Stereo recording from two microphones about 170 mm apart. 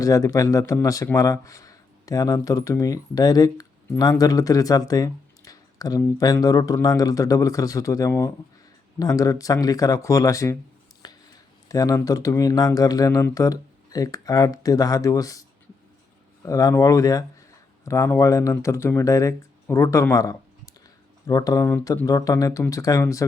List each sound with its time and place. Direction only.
0.0 s speech: 20° left (ahead or behind)
11.0 s a sound: 25° left (ahead or behind)
11.7 s speech: 20° left (ahead or behind)